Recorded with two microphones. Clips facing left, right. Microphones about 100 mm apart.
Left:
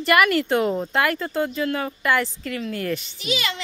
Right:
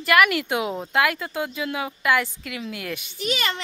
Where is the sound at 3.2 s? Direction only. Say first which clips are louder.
Right 3 dB; 40° right (ahead or behind).